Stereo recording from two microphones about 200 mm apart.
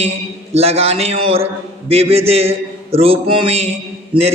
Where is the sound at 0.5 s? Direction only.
30° right (ahead or behind).